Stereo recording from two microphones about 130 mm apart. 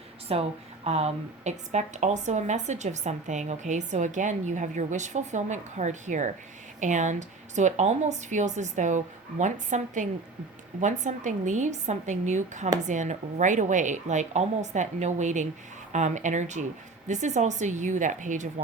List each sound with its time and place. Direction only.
0.3 s a woman's voice: 50° right (ahead or behind); by 18.6 s 70° right (ahead or behind)